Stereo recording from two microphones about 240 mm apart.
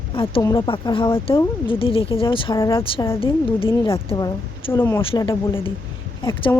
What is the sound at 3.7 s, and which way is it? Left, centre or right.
Speech, centre.